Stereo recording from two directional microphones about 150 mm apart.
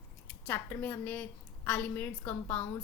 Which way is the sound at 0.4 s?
10° left (ahead or behind).